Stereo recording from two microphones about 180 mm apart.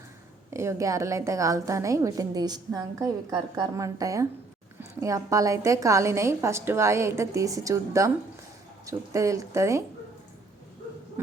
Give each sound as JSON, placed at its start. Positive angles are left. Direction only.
{"t": 0.5, "sound": "a woman's voice", "side_deg": -15}